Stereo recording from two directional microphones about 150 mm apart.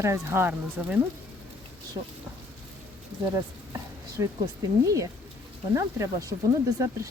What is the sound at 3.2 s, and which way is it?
Speech, 25° right (ahead or behind).